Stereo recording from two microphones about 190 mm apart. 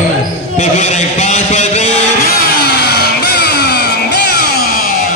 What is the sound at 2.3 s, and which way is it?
Music, 60° left (ahead or behind).